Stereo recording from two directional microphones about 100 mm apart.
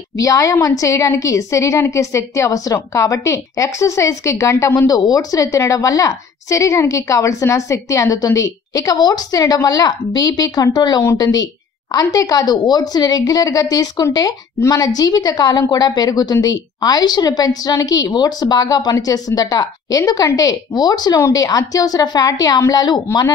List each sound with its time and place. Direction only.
0.2 s a woman's voice: 35° left (ahead or behind)